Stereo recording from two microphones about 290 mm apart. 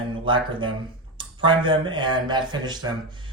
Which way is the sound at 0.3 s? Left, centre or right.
Centre.